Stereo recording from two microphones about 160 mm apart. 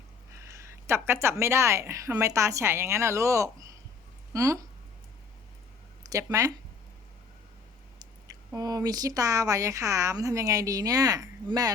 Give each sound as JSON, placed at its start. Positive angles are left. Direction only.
{"t": 0.3, "sound": "a woman's voice", "side_deg": -15}
{"t": 8.5, "sound": "speech", "side_deg": -25}